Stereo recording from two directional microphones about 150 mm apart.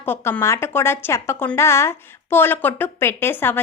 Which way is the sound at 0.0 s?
15° left (ahead or behind).